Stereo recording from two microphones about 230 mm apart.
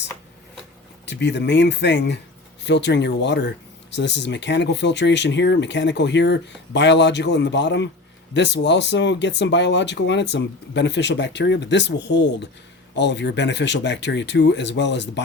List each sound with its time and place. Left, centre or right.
1.0 s speech: left